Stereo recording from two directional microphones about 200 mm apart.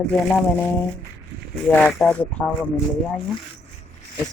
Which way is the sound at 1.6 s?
5° left (ahead or behind).